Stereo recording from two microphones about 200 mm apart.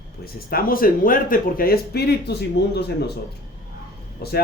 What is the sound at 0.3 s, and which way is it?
Speech, 45° left (ahead or behind).